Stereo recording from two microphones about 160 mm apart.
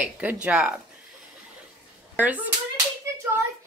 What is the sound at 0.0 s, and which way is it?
Speech, 10° right (ahead or behind).